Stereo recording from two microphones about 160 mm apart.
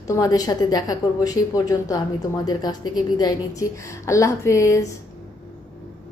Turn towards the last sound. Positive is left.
turn(degrees=20)  # may be behind; listen again after turning